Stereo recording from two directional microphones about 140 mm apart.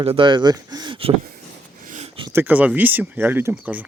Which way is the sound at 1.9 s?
55° right (ahead or behind).